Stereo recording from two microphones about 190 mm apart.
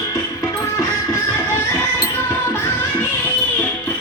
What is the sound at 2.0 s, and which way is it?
Music, 10° left (ahead or behind).